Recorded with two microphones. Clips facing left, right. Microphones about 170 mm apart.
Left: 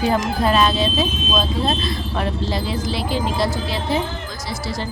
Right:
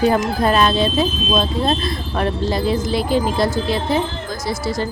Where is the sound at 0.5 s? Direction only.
50° right (ahead or behind).